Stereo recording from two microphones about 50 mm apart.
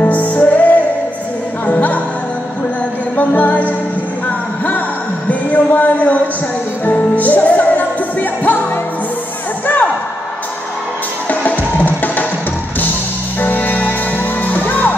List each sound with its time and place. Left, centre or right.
0.0 s music: left
3.2 s music: left
5.3 s a sound: left
6.9 s music: left
11.2 s music: left
13.4 s music: left